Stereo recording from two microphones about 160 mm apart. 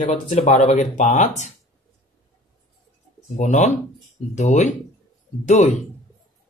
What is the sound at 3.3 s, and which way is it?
Speech, 50° left (ahead or behind).